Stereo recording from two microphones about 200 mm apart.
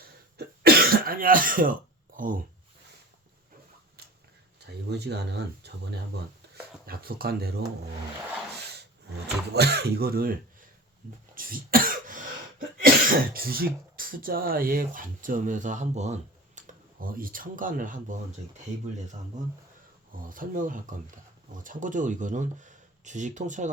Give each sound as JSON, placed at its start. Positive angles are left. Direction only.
{"t": 0.0, "sound": "cough", "side_deg": -50}
{"t": 2.1, "sound": "speech", "side_deg": -45}
{"t": 4.6, "sound": "speech", "side_deg": -55}
{"t": 9.5, "sound": "speech", "side_deg": -55}
{"t": 11.3, "sound": "cough", "side_deg": -45}
{"t": 20.1, "sound": "speech", "side_deg": -45}